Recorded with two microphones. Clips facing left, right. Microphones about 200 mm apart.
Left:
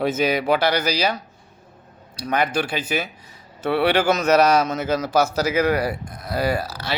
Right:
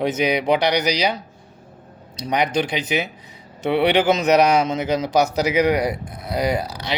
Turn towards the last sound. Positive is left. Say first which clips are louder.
# right 1 dB
turn(degrees=-20)  # may be behind; listen again after turning